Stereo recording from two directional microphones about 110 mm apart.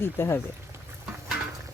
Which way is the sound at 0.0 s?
20° left (ahead or behind).